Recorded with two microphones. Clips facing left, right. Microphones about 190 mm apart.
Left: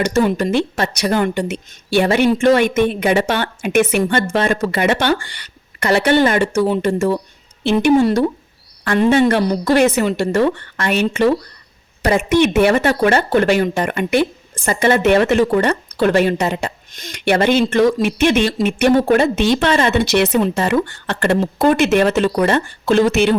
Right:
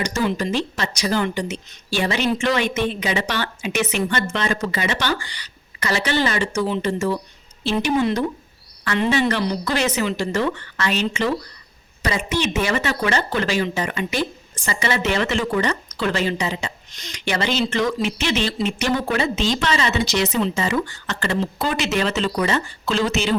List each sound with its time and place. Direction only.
0.1 s speech: 55° left (ahead or behind)
8.0 s a woman's voice: 45° left (ahead or behind)